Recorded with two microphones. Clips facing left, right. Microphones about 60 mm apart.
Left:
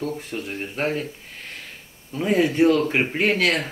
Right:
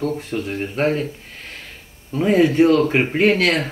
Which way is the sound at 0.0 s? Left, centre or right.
Right.